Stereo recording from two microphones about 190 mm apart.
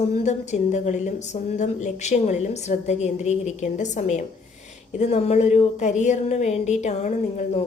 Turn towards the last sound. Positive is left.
turn(degrees=35)  # may be behind; listen again after turning